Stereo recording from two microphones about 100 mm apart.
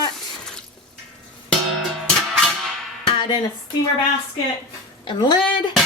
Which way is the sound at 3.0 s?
50° left (ahead or behind).